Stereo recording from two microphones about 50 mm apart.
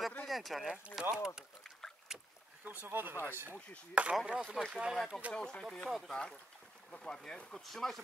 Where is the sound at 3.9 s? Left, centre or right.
Right.